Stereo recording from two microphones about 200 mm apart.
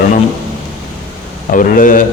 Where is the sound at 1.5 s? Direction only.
40° left (ahead or behind).